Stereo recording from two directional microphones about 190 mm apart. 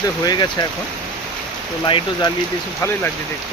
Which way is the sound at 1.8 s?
25° left (ahead or behind).